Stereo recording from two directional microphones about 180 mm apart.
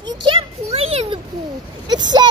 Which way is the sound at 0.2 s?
30° right (ahead or behind).